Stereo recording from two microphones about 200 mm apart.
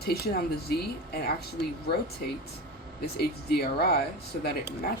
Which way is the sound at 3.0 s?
50° left (ahead or behind).